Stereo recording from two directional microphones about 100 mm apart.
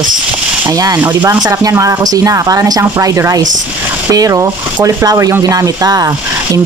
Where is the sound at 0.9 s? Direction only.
20° right (ahead or behind).